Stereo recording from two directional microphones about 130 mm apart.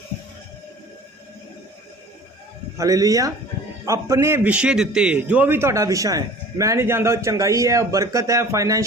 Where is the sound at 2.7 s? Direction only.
25° right (ahead or behind).